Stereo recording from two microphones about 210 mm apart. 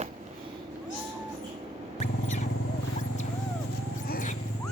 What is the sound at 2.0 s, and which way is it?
Rodents, 35° left (ahead or behind).